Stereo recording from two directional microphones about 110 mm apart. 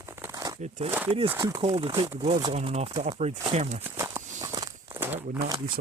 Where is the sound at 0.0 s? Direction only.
25° right (ahead or behind).